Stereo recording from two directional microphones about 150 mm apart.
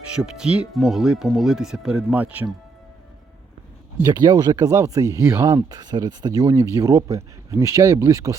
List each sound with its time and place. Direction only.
0.2 s speech: 5° right (ahead or behind)
4.1 s speech: 25° right (ahead or behind)